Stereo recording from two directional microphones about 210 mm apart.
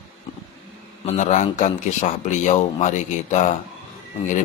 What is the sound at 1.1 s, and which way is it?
Speech, 35° left (ahead or behind).